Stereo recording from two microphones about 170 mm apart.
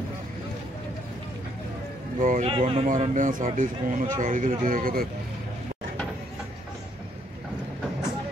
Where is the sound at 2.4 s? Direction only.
35° right (ahead or behind); by 5.0 s 55° right (ahead or behind).